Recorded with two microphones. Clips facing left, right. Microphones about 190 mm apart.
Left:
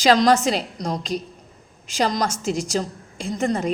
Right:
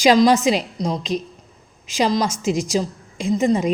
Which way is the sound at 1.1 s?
45° right (ahead or behind).